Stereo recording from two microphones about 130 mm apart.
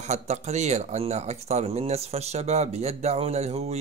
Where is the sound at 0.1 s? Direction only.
60° right (ahead or behind).